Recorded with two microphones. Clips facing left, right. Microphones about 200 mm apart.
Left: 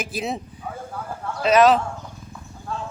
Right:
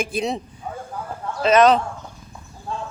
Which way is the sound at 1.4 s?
Centre (ahead or behind).